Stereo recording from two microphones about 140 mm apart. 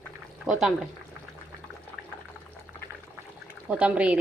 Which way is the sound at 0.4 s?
5° right (ahead or behind).